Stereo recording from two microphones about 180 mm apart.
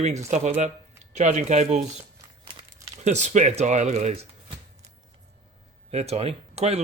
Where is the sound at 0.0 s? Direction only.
40° right (ahead or behind).